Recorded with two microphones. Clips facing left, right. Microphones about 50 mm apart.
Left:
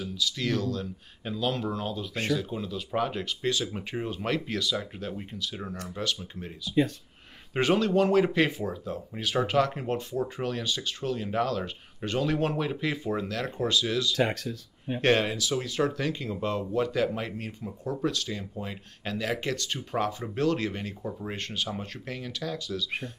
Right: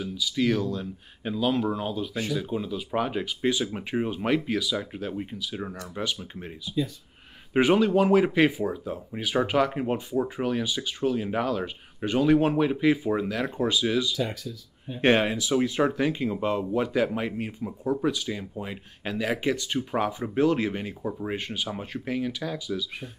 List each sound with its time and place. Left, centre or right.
0.0 s speech: centre
14.1 s speech: left
15.0 s speech: centre